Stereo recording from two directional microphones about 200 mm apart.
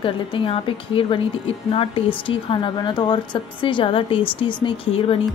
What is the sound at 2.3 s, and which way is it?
Speech, 25° left (ahead or behind).